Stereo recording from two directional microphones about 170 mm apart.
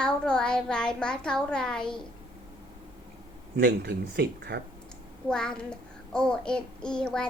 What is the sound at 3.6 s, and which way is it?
Speech, 75° right (ahead or behind).